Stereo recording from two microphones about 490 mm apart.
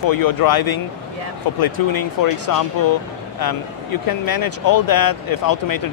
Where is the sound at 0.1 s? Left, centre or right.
Left.